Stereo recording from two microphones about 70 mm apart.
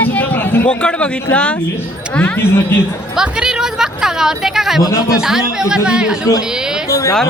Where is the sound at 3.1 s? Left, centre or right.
Centre.